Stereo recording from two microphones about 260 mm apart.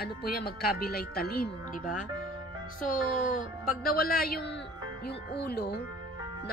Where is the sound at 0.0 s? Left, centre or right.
Left.